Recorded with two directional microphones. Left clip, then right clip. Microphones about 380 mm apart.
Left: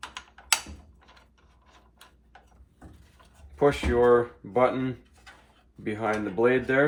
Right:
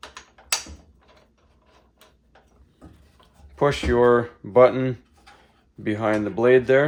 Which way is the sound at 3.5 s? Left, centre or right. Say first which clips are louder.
Right 3 dB; right.